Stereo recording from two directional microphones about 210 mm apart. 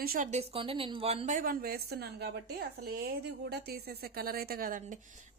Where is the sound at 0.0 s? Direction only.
40° right (ahead or behind).